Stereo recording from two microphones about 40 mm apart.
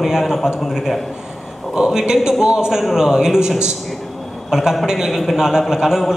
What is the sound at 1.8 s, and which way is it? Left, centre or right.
A man's voice, centre.